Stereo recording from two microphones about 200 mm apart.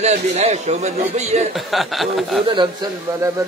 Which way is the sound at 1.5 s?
Centre (ahead or behind).